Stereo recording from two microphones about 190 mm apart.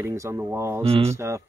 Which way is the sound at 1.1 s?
15° right (ahead or behind).